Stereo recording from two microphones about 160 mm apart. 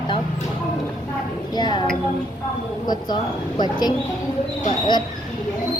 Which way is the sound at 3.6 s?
25° left (ahead or behind).